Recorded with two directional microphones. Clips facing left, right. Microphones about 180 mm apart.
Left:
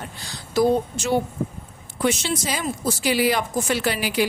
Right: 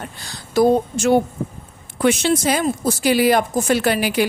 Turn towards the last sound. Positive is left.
turn(degrees=-55)  # may be behind; listen again after turning